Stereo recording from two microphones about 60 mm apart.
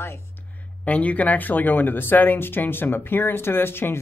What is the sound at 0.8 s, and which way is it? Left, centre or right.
Speech, left.